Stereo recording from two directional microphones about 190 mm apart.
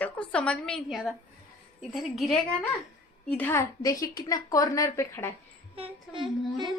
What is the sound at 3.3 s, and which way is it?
A woman's voice, 10° left (ahead or behind).